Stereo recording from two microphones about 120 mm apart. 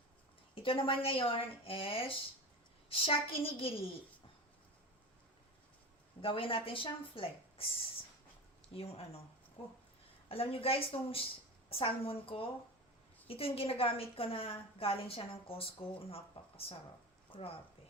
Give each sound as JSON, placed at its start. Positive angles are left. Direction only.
{"t": 0.5, "sound": "a woman's voice", "side_deg": 50}
{"t": 6.2, "sound": "a woman's voice", "side_deg": 50}
{"t": 8.7, "sound": "a woman's voice", "side_deg": 55}